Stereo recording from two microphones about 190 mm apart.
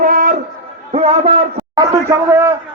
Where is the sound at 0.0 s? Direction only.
45° right (ahead or behind).